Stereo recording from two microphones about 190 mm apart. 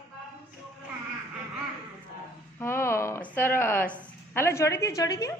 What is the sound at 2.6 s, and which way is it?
A woman's voice, 15° left (ahead or behind).